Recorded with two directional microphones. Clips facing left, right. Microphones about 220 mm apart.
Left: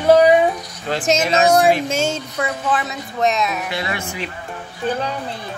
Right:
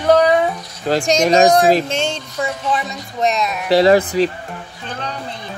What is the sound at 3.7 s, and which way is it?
Speech, 35° right (ahead or behind).